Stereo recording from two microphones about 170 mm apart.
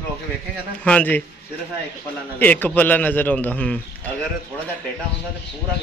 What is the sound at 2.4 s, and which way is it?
Speech, 10° left (ahead or behind).